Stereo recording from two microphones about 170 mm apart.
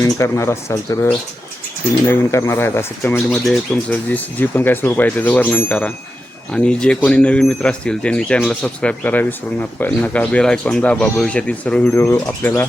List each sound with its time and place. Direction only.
0.0 s speech: 15° left (ahead or behind)
3.2 s speech: centre (ahead or behind)